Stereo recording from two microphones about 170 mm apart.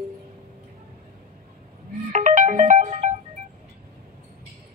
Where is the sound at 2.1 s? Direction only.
50° right (ahead or behind).